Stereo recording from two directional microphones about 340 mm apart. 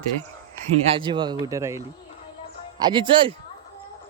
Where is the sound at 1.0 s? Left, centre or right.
Centre.